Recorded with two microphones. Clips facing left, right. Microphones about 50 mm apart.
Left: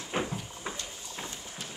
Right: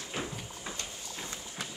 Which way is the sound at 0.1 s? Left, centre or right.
Left.